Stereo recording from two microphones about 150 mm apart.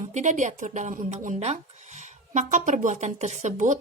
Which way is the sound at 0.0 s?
55° right (ahead or behind).